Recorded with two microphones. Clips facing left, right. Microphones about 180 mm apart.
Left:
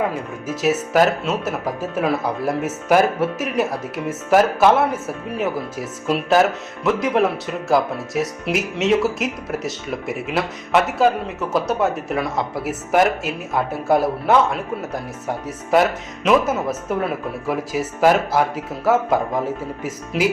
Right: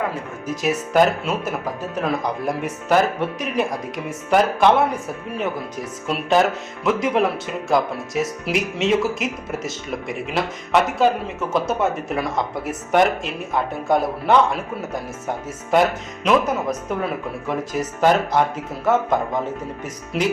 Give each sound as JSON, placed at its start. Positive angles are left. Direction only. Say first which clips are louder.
{"t": 0.4, "sound": "speech", "louder": "left 2 dB", "side_deg": 5}